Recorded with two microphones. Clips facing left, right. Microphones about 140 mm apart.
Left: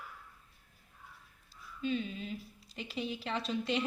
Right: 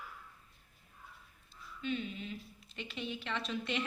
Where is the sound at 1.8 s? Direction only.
35° left (ahead or behind).